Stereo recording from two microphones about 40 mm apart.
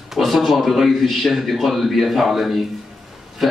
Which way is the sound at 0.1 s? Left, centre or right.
Centre.